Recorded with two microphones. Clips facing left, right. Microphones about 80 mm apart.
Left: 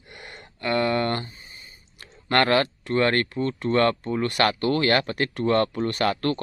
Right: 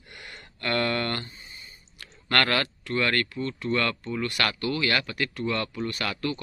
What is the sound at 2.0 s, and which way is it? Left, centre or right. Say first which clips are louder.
Speech: left 4 dB; left.